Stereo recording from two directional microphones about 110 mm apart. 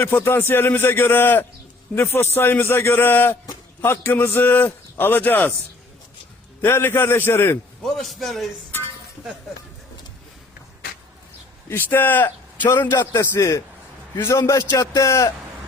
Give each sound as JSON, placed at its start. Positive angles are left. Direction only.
{"t": 0.0, "sound": "a man's voice", "side_deg": 25}
{"t": 6.6, "sound": "a man's voice", "side_deg": 20}
{"t": 7.8, "sound": "a man's voice", "side_deg": 5}
{"t": 11.7, "sound": "a man's voice", "side_deg": 20}